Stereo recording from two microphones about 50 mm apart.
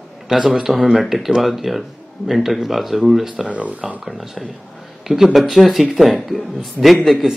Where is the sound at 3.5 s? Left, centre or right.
Right.